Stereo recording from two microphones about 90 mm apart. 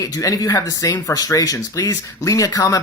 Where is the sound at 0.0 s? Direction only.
40° left (ahead or behind).